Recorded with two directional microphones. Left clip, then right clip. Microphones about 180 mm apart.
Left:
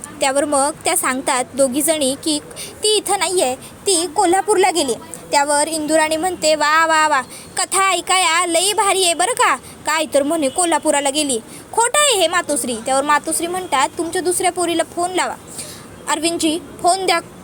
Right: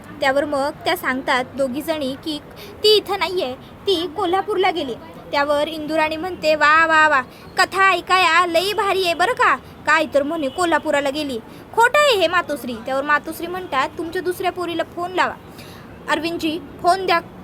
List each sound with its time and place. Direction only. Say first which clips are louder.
0.2 s a woman's voice: left 2 dB; 20° left (ahead or behind)